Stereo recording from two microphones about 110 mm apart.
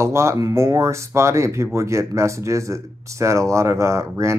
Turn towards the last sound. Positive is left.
turn(degrees=-25)  # may be behind; listen again after turning